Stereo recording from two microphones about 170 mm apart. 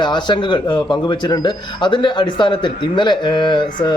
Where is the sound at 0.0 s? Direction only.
25° left (ahead or behind).